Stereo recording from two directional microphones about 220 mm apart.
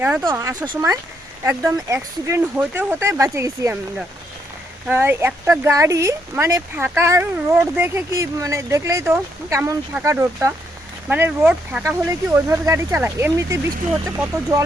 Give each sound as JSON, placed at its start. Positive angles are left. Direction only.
{"t": 0.0, "sound": "speech", "side_deg": -10}
{"t": 4.9, "sound": "speech", "side_deg": -10}